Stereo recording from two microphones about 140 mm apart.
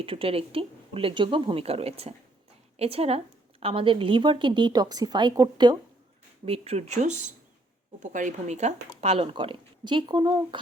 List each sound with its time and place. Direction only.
0.0 s a woman's voice: 40° right (ahead or behind)
6.4 s speech: 45° right (ahead or behind)